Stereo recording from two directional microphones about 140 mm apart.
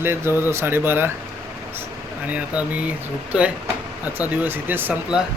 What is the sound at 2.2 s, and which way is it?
Speech, 10° right (ahead or behind).